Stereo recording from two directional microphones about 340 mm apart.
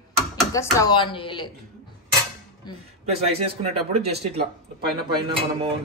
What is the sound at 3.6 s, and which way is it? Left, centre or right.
Speech, centre.